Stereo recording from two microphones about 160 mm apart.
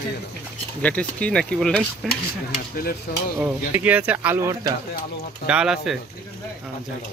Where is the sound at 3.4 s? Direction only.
10° right (ahead or behind).